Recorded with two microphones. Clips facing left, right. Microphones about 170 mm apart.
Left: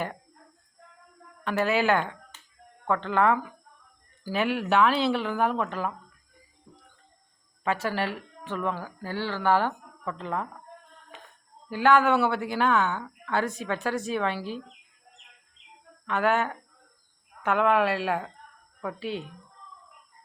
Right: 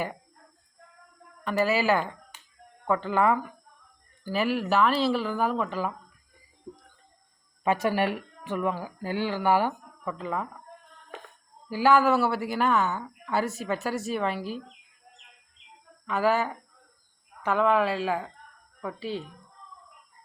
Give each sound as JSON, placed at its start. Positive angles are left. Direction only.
{"t": 1.5, "sound": "speech", "side_deg": 0}
{"t": 6.7, "sound": "music", "side_deg": -40}
{"t": 7.6, "sound": "speech", "side_deg": -15}
{"t": 11.7, "sound": "speech", "side_deg": -5}
{"t": 16.0, "sound": "speech", "side_deg": 0}